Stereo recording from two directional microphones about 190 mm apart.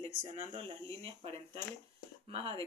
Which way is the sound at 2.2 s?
30° right (ahead or behind).